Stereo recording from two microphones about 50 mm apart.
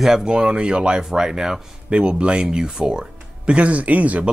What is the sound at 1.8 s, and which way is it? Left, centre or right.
Speech, right.